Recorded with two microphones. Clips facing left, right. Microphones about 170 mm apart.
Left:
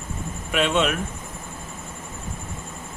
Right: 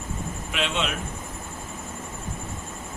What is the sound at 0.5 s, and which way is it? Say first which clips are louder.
Speech: left 7 dB; 50° left (ahead or behind).